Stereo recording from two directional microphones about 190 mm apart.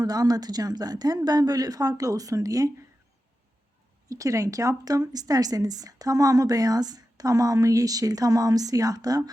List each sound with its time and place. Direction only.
0.0 s speech: 20° right (ahead or behind)
4.1 s speech: 15° right (ahead or behind)